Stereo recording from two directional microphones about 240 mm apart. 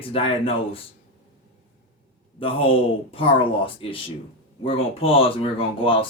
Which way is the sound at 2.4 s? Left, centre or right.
Left.